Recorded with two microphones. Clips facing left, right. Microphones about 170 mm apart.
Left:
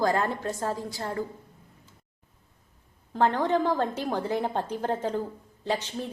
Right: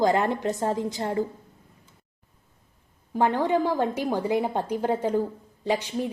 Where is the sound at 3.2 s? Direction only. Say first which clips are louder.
Right 1 dB; 10° right (ahead or behind).